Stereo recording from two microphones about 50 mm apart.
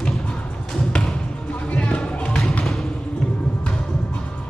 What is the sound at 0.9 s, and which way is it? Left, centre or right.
Basketball bounce, centre.